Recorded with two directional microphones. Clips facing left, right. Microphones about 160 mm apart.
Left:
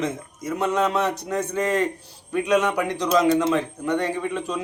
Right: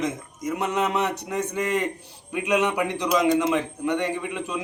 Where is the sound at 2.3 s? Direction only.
15° right (ahead or behind).